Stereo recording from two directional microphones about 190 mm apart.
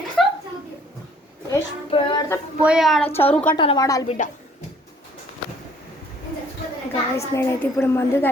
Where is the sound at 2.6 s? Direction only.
5° right (ahead or behind).